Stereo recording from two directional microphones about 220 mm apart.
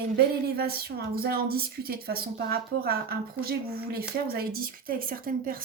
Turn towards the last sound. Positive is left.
turn(degrees=-40)  # may be behind; listen again after turning